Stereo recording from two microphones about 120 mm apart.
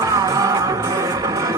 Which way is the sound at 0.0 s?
30° right (ahead or behind).